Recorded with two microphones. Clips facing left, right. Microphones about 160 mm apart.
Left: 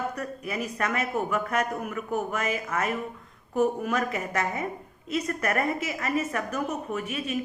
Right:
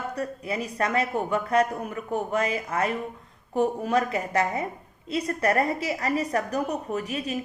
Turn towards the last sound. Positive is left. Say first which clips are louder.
# right 1 dB
turn(degrees=-35)  # may be behind; listen again after turning